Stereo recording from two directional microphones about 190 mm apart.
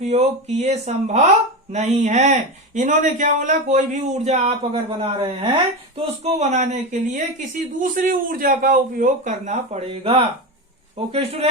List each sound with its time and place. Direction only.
0.0 s a man's voice: 35° right (ahead or behind)
6.2 s a man's voice: 35° right (ahead or behind)